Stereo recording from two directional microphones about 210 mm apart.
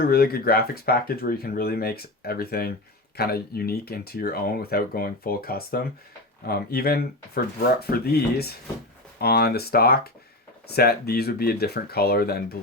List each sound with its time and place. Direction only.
0.0 s speech: 45° left (ahead or behind)